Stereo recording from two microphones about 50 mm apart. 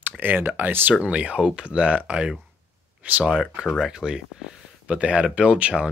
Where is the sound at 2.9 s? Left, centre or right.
Right.